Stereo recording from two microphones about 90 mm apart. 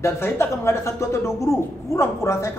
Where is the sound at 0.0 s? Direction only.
30° left (ahead or behind).